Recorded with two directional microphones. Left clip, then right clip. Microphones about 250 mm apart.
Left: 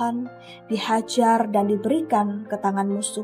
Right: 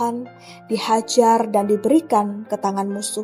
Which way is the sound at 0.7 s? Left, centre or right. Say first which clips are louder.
Right 4 dB; right.